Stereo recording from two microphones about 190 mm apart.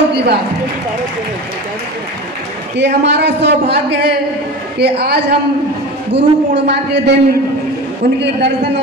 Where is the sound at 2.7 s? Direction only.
65° right (ahead or behind).